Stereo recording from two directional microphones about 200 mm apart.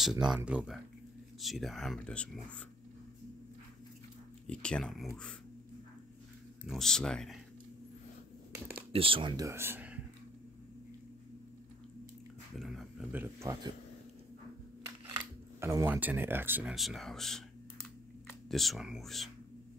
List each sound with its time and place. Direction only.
0.0 s speech: centre (ahead or behind)
4.5 s speech: 5° left (ahead or behind)
6.6 s speech: centre (ahead or behind)
8.9 s speech: 25° right (ahead or behind); by 9.9 s 10° right (ahead or behind)
12.5 s speech: centre (ahead or behind)
15.1 s speech: 15° right (ahead or behind); by 17.4 s centre (ahead or behind)
18.5 s speech: centre (ahead or behind)